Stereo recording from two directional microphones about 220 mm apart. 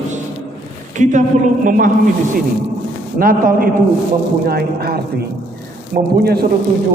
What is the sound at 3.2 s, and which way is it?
A man's voice, 40° right (ahead or behind).